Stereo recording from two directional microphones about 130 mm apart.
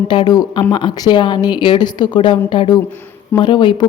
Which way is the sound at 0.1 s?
35° left (ahead or behind).